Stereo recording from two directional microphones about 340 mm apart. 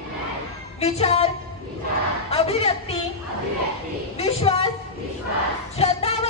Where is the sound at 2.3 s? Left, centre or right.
Centre.